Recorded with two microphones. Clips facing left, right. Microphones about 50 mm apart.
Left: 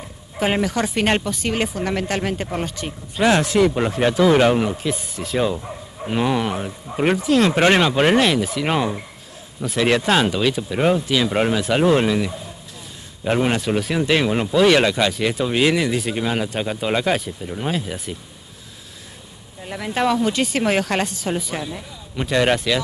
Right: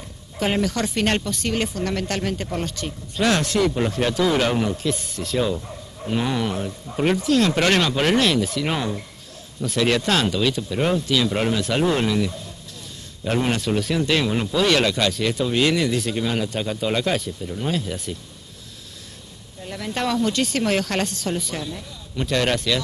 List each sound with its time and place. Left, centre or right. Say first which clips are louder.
0.4 s speech: left 2 dB; centre
19.6 s speech: left 4 dB; centre